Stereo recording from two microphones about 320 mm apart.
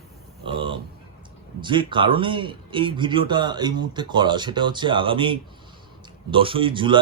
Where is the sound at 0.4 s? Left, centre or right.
Centre.